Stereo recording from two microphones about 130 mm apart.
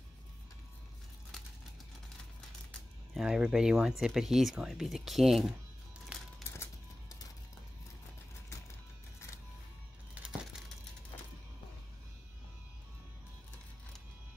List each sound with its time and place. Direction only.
3.2 s speech: 5° right (ahead or behind)
6.1 s crumpling: 5° right (ahead or behind)
6.5 s music: 20° left (ahead or behind)